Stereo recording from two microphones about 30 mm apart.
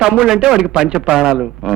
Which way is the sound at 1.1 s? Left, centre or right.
Centre.